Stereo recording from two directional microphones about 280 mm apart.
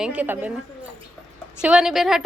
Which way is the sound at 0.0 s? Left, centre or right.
Centre.